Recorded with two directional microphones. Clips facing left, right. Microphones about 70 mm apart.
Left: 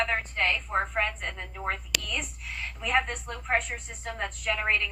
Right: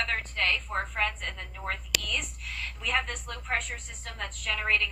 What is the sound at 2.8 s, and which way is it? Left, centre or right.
A woman's voice, left.